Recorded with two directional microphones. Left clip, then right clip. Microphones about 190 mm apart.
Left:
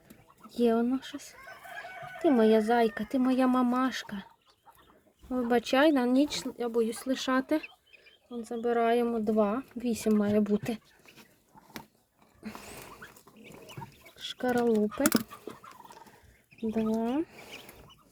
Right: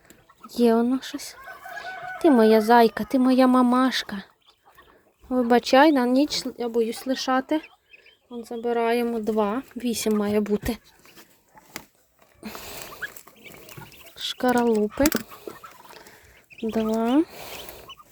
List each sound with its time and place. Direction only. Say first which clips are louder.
0.4 s speech: right 7 dB; 20° right (ahead or behind)
5.3 s speech: right 9 dB; 20° right (ahead or behind)
7.2 s speech: right 5 dB; 5° right (ahead or behind); by 10.8 s 25° right (ahead or behind)
14.2 s a sound: right 7 dB; 25° right (ahead or behind)
15.0 s speech: right 7 dB; 25° right (ahead or behind)
16.6 s speech: right 6 dB; 30° right (ahead or behind)